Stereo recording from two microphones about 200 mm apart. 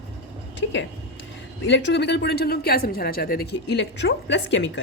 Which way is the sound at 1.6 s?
60° left (ahead or behind).